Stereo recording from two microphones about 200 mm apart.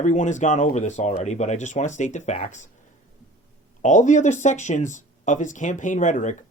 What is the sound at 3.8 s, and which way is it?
Speech, 35° left (ahead or behind).